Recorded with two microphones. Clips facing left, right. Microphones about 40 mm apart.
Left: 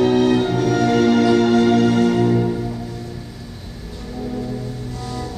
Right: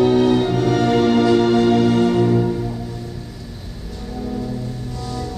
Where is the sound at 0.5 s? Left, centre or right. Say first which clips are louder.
Even; centre.